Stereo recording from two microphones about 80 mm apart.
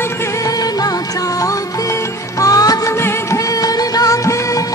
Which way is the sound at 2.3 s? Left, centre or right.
Left.